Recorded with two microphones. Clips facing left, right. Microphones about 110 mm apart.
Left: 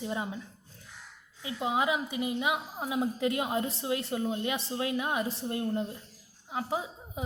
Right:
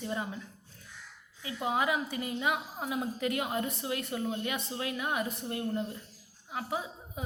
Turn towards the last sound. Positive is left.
turn(degrees=25)  # may be behind; listen again after turning